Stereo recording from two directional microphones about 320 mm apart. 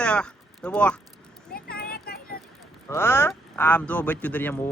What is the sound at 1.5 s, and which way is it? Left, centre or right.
Vehicle, left.